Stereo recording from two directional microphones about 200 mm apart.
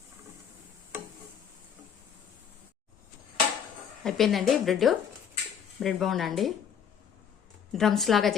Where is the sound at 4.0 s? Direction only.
Centre (ahead or behind).